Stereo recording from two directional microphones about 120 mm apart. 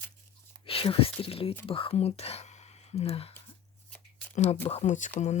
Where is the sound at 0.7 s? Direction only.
50° left (ahead or behind).